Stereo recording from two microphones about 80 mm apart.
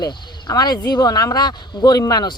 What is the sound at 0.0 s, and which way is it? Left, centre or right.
Speech, left.